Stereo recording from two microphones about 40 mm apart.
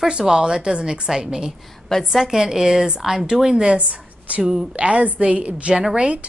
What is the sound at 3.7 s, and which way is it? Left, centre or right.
Speech, right.